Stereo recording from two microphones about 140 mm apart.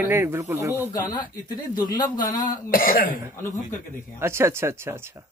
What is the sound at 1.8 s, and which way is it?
Speech, 30° left (ahead or behind).